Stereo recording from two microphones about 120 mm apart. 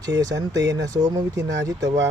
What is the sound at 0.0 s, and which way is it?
Speech, 30° right (ahead or behind).